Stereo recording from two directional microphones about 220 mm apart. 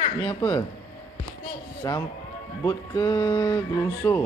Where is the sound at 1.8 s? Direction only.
15° left (ahead or behind).